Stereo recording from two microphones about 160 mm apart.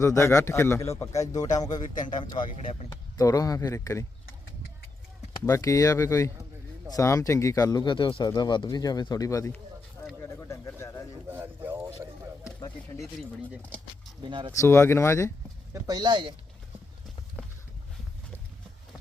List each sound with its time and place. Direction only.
0.0 s a man's voice: 20° left (ahead or behind)
5.5 s speech: 20° left (ahead or behind)
10.2 s bird: 15° left (ahead or behind)
11.3 s a sound: 15° right (ahead or behind)
14.2 s speech: 30° right (ahead or behind)
14.5 s a man's voice: 20° left (ahead or behind)
15.7 s speech: 25° right (ahead or behind)